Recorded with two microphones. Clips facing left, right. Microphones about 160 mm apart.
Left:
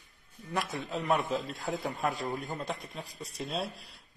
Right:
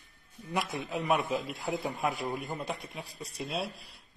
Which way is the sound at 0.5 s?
15° right (ahead or behind).